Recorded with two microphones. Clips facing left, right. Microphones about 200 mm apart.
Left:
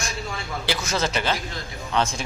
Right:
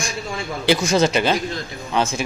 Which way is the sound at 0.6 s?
15° right (ahead or behind).